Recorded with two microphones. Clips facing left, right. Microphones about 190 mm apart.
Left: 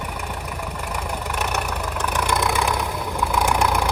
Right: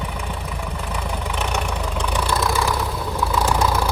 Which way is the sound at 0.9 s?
10° left (ahead or behind).